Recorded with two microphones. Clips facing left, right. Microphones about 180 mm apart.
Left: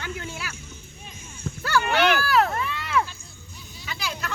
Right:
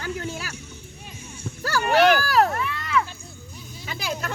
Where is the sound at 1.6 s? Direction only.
40° right (ahead or behind).